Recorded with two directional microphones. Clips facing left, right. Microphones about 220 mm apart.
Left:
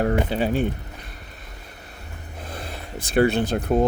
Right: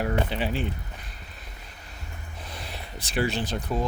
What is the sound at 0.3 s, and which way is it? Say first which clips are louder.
Speech: left 6 dB; 45° left (ahead or behind).